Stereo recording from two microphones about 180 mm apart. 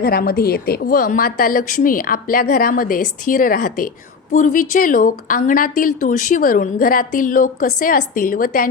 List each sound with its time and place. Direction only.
0.0 s a woman's voice: 55° left (ahead or behind)